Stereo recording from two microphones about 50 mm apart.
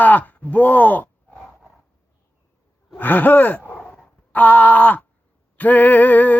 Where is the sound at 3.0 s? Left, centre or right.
Left.